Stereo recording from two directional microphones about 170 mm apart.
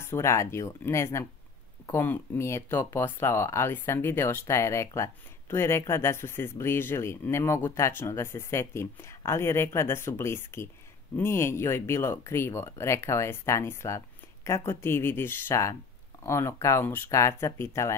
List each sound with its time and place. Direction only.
0.0 s speech: 15° left (ahead or behind)